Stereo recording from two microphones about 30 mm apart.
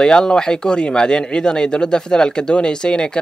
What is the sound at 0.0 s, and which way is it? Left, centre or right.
Speech, left.